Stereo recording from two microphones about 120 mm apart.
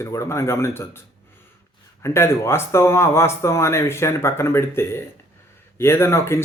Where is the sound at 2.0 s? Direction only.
20° left (ahead or behind).